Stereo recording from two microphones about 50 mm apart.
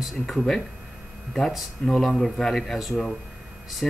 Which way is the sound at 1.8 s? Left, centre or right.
Left.